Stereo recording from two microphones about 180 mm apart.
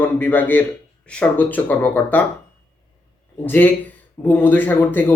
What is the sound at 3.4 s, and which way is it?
Speech, 10° left (ahead or behind).